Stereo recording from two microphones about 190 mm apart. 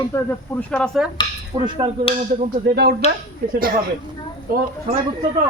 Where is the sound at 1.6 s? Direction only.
25° right (ahead or behind).